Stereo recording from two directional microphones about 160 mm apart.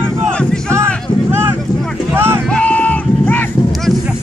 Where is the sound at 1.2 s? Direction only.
15° right (ahead or behind).